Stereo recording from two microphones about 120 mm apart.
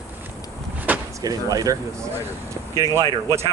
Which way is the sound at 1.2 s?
30° right (ahead or behind).